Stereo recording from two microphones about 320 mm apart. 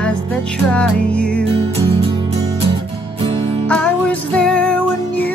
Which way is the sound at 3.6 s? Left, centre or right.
Centre.